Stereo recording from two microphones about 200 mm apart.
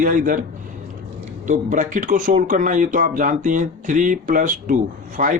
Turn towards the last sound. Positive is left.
turn(degrees=-40)  # may be behind; listen again after turning